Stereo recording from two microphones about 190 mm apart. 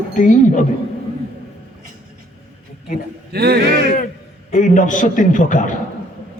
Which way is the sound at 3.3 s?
55° right (ahead or behind).